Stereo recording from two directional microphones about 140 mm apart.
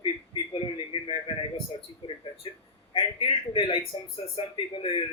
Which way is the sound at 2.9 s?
35° left (ahead or behind).